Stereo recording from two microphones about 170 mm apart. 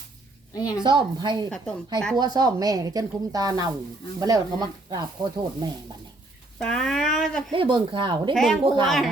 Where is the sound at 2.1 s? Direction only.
25° right (ahead or behind).